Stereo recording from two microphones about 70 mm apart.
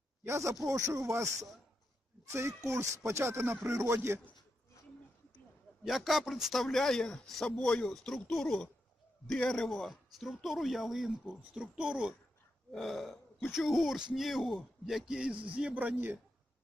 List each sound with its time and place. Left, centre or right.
0.3 s speech: right
2.2 s speech: right
5.8 s a man's voice: centre
11.5 s a man's voice: centre
12.7 s a man's voice: centre; by 16.1 s right